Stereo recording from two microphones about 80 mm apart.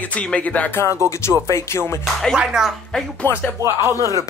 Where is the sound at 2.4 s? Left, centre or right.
Centre.